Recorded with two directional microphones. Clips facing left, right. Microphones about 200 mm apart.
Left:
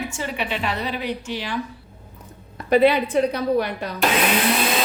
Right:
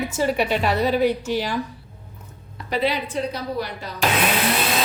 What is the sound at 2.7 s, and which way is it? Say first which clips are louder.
A woman's voice: left 7 dB; 55° left (ahead or behind).